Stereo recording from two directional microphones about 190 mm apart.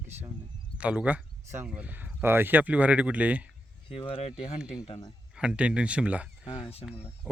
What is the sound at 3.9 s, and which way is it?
Speech, 30° left (ahead or behind).